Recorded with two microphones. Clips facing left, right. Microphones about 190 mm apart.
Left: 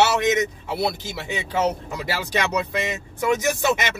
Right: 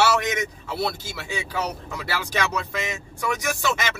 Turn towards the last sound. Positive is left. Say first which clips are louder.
# left 4 dB
turn(degrees=20)  # may be behind; listen again after turning